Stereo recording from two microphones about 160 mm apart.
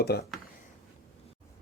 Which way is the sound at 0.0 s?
90° left.